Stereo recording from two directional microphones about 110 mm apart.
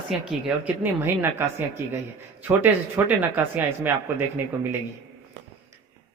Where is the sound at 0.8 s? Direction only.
20° right (ahead or behind).